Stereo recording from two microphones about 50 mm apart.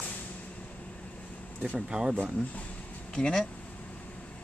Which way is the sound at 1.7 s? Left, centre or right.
Centre.